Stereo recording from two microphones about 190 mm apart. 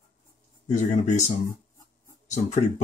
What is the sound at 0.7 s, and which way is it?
Speech, 40° left (ahead or behind).